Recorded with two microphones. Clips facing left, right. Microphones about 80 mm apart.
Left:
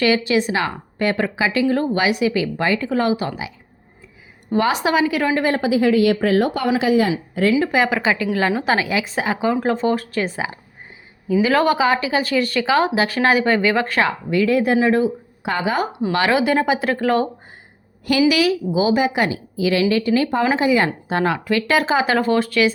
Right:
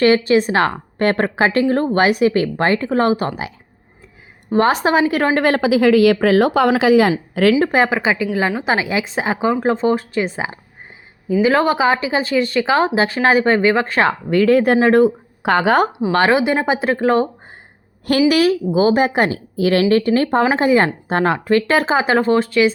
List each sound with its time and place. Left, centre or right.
0.0 s speech: right
4.5 s a woman's voice: right
7.6 s speech: right
7.9 s speech: centre; by 15.9 s right
16.1 s speech: right
18.3 s speech: right